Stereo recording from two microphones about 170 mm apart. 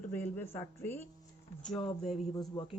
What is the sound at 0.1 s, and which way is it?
Speech, 10° left (ahead or behind).